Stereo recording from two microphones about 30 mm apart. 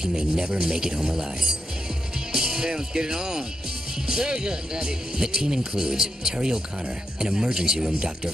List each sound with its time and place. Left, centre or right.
0.0 s speech: right